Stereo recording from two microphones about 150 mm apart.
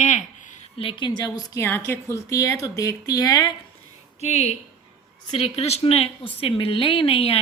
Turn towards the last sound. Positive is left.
turn(degrees=40)  # may be behind; listen again after turning